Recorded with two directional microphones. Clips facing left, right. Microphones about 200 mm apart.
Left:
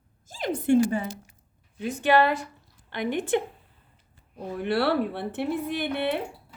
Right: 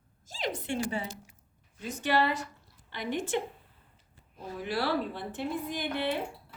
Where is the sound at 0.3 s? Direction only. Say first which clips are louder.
Left 11 dB; 55° left (ahead or behind).